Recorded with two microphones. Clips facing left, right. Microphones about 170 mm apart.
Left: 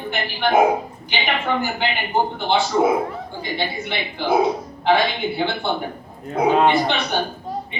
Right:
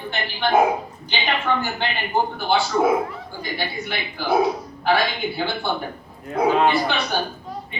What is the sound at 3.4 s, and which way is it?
A woman's voice, 20° left (ahead or behind).